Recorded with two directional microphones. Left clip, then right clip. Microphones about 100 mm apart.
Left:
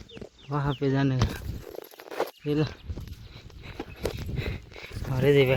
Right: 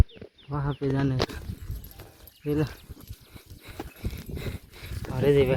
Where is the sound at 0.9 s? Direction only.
15° right (ahead or behind).